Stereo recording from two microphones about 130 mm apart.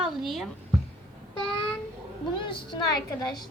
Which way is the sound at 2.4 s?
40° left (ahead or behind).